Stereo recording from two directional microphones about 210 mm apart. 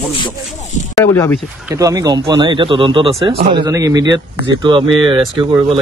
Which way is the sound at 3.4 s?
50° right (ahead or behind).